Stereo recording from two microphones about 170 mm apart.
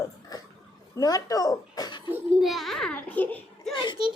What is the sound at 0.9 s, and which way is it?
Speech, 20° left (ahead or behind).